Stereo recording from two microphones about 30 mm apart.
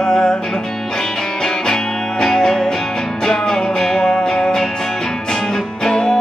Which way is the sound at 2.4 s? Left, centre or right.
Centre.